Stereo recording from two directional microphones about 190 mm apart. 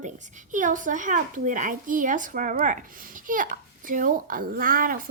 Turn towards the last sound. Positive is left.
turn(degrees=-50)  # may be behind; listen again after turning